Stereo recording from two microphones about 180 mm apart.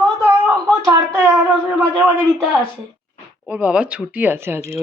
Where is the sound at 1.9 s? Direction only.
5° left (ahead or behind).